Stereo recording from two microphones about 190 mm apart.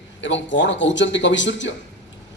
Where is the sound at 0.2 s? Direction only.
75° left (ahead or behind).